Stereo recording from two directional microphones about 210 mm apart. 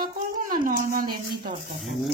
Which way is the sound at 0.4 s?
40° right (ahead or behind).